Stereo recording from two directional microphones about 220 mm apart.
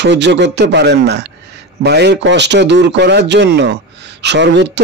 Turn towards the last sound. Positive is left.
turn(degrees=-50)  # may be behind; listen again after turning